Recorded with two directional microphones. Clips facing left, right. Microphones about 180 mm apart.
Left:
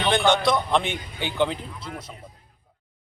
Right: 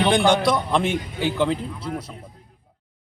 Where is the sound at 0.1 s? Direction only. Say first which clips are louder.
Left 2 dB; 10° right (ahead or behind).